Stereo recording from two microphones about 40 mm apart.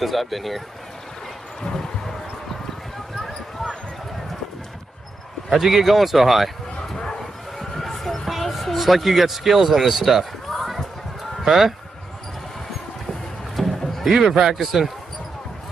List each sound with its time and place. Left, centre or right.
0.0 s speech: centre
1.6 s a sound: centre
5.5 s speech: centre
7.0 s bow-wow: centre
10.5 s a sound: centre
11.4 s speech: centre
13.6 s music: centre
14.1 s speech: centre